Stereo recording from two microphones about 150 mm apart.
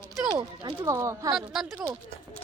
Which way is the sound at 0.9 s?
20° right (ahead or behind).